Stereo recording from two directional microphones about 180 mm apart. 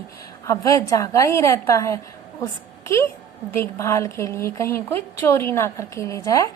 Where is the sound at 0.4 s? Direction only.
15° left (ahead or behind).